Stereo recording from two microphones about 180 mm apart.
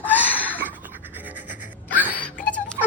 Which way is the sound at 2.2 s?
5° left (ahead or behind).